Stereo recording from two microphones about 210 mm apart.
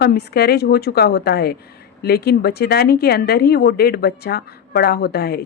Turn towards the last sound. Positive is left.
turn(degrees=50)  # may be behind; listen again after turning